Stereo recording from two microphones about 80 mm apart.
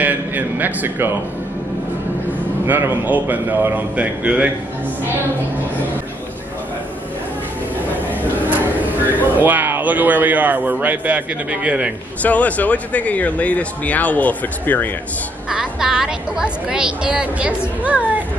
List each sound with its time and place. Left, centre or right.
0.0 s a man's voice: right
2.6 s speech: right
7.9 s a sound: left
8.5 s speech: right
12.2 s speech: centre
15.5 s a woman's voice: centre